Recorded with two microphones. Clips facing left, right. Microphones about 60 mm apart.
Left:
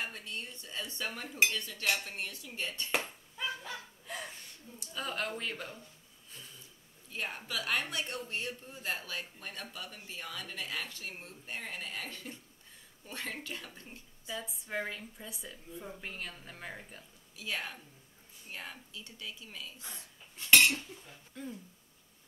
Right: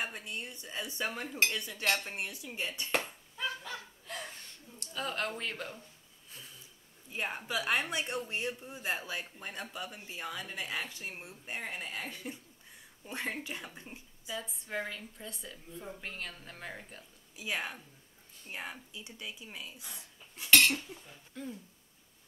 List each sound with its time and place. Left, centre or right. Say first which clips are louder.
0.0 s a woman's voice: right 2 dB; centre
2.9 s a sound: right 2 dB; centre
4.7 s a woman's voice: right 1 dB; centre
7.1 s a woman's voice: right 3 dB; centre
14.3 s a woman's voice: even; centre
17.4 s a woman's voice: right 2 dB; centre
21.1 s a woman's voice: right 1 dB; centre